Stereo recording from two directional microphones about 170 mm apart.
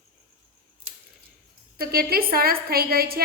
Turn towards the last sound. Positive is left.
turn(degrees=-65)  # may be behind; listen again after turning